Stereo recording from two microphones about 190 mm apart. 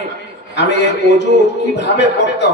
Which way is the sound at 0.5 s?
65° left (ahead or behind).